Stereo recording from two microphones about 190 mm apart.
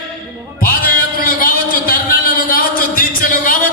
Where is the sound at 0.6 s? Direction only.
50° left (ahead or behind).